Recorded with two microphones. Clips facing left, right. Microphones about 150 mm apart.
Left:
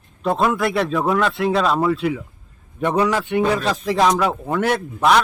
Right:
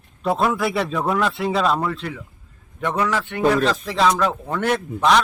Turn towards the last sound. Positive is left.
turn(degrees=5)  # may be behind; listen again after turning